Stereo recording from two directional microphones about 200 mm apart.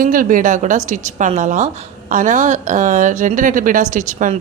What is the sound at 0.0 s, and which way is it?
Speech, 45° right (ahead or behind).